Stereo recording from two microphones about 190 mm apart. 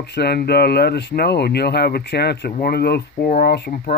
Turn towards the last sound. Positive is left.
turn(degrees=55)  # may be behind; listen again after turning